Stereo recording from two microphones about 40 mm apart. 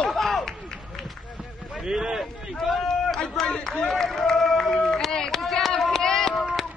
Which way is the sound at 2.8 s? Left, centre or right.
Centre.